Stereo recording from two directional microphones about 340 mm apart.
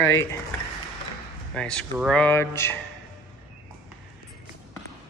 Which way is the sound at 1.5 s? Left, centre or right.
Centre.